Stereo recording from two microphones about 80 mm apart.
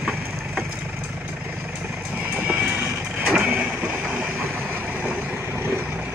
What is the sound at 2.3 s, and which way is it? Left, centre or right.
Vehicle, centre.